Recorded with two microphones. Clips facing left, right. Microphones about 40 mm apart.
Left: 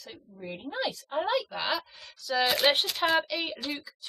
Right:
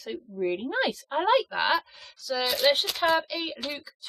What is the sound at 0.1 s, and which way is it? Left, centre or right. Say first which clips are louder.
A woman's voice: right 13 dB; right.